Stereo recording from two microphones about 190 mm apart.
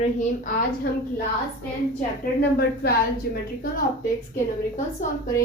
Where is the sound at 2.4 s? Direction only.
55° left (ahead or behind).